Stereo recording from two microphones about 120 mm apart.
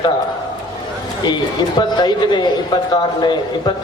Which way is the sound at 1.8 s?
40° left (ahead or behind).